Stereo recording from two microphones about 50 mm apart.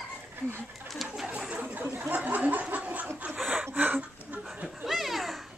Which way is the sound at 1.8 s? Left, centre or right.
Right.